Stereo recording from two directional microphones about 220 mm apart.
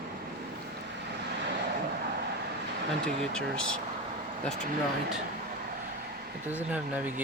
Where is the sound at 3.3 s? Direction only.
5° left (ahead or behind).